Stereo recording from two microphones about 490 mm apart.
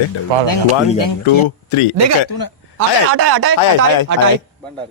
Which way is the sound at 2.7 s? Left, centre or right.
Right.